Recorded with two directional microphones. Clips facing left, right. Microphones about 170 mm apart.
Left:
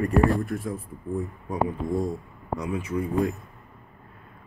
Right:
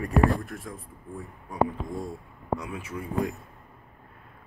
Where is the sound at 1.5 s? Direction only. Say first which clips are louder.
Right 1 dB; 20° left (ahead or behind).